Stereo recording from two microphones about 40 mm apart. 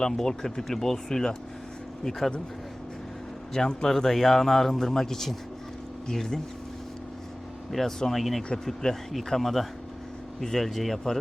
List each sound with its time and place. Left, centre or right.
0.0 s a man's voice: centre
3.5 s a man's voice: centre
7.7 s a man's voice: centre
9.1 s a man's voice: centre